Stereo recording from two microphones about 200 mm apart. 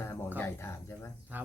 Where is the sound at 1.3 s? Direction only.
5° right (ahead or behind).